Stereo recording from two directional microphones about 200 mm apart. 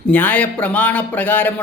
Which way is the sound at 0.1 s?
10° left (ahead or behind).